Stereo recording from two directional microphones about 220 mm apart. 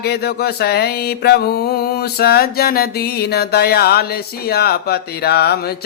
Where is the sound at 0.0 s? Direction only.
45° left (ahead or behind).